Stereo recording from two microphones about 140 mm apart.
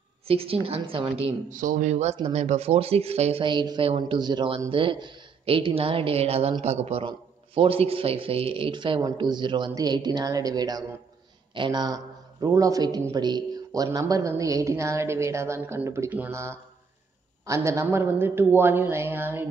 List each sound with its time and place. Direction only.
0.3 s speech: 45° right (ahead or behind)
1.5 s speech: 70° right (ahead or behind); by 3.4 s 45° right (ahead or behind)
3.4 s a man's voice: 35° right (ahead or behind); by 19.4 s 15° right (ahead or behind)